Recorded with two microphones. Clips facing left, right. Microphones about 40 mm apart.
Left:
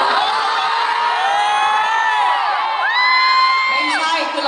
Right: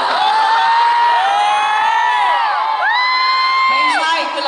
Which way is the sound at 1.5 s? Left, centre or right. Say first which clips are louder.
Right 2 dB; right.